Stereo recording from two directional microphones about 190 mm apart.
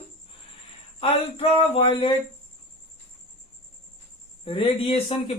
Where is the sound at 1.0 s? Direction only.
30° left (ahead or behind).